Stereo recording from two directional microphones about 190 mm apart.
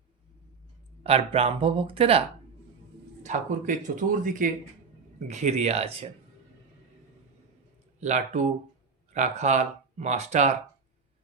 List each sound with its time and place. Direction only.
1.0 s speech: 30° right (ahead or behind)
3.3 s speech: 40° right (ahead or behind)
8.0 s speech: 40° right (ahead or behind)